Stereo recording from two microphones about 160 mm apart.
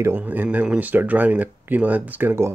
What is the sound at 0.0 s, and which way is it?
Speech, 10° right (ahead or behind).